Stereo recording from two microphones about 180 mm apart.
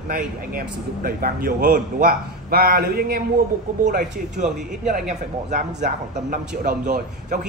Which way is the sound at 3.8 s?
45° right (ahead or behind).